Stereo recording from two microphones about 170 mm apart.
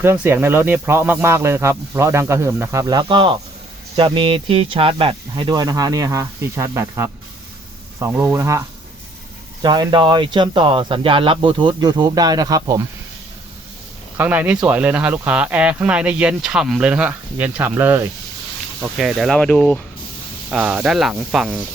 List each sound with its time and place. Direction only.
0.0 s speech: 15° right (ahead or behind)
14.2 s speech: 10° right (ahead or behind); by 19.8 s 5° left (ahead or behind)
20.5 s speech: 5° right (ahead or behind)